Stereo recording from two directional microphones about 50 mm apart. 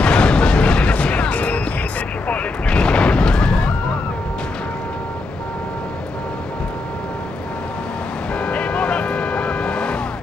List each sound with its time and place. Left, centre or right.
0.0 s artillery fire: left
2.2 s eruption: left
8.4 s vehicle: left